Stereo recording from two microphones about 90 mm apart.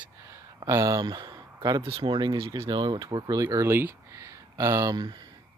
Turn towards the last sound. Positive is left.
turn(degrees=-55)  # may be behind; listen again after turning